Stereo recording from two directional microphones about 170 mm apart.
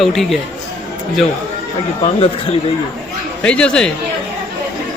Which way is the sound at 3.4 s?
5° left (ahead or behind).